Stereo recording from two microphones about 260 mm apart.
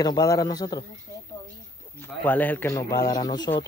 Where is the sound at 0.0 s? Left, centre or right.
Centre.